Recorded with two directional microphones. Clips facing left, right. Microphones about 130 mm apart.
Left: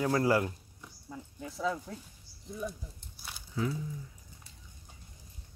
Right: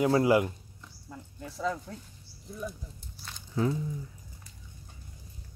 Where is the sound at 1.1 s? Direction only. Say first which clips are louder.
Even; centre (ahead or behind).